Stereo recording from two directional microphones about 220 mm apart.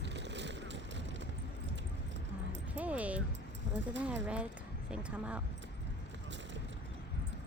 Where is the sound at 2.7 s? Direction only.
5° right (ahead or behind).